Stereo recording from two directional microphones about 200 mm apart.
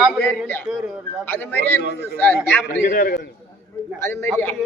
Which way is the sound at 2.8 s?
45° left (ahead or behind).